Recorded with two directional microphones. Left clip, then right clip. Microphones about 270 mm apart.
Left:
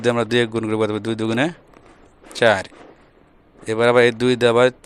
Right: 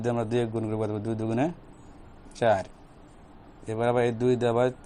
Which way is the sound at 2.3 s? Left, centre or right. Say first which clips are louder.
Left 8 dB; left.